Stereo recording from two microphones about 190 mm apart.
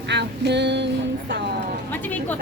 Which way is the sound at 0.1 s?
65° right (ahead or behind).